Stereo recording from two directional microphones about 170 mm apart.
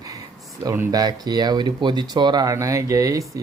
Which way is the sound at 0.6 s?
15° right (ahead or behind).